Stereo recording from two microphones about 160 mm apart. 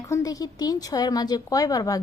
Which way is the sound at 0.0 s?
20° left (ahead or behind).